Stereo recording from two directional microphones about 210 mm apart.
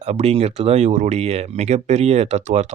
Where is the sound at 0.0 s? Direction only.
30° right (ahead or behind).